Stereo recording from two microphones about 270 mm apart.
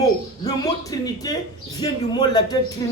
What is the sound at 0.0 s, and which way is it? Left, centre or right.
A man's voice, centre.